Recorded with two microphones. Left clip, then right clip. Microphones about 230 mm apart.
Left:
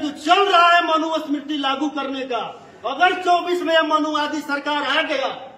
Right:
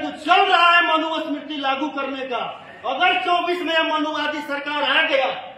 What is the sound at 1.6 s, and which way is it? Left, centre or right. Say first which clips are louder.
Speech: right 1 dB; left.